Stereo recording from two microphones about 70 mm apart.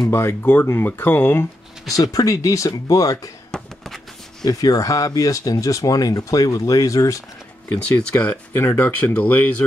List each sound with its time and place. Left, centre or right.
0.1 s speech: left
1.9 s speech: left
3.5 s a sound: centre
4.5 s speech: left
7.7 s speech: left